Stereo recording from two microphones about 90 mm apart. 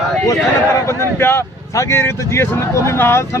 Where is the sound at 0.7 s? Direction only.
30° left (ahead or behind).